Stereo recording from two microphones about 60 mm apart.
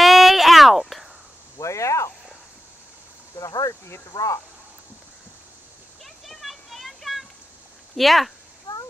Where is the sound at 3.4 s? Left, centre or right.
Left.